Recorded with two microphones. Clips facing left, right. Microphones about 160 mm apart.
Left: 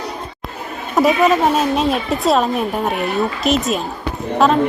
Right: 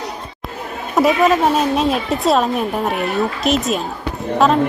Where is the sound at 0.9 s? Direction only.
Centre (ahead or behind).